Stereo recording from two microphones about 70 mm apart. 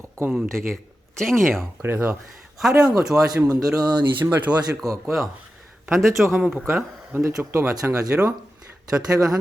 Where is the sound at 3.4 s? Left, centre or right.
Right.